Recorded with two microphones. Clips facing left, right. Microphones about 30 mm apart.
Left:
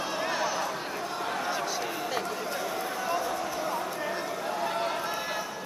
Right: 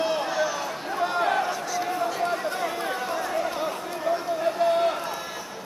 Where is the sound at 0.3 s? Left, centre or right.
Centre.